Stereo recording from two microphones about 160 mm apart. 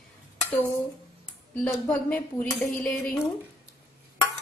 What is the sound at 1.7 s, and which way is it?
A woman's voice, 15° left (ahead or behind).